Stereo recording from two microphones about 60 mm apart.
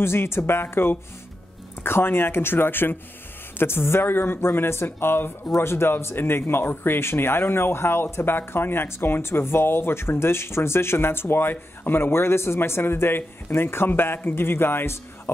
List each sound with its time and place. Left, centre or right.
0.0 s speech: left